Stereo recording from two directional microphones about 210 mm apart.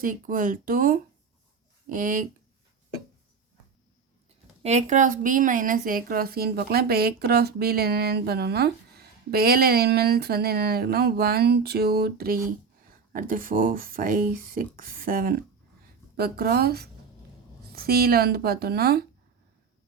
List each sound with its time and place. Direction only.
0.0 s speech: 40° right (ahead or behind)
4.6 s a woman's voice: 35° right (ahead or behind); by 19.0 s 50° right (ahead or behind)